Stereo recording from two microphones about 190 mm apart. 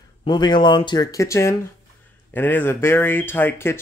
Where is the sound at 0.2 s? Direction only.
25° left (ahead or behind).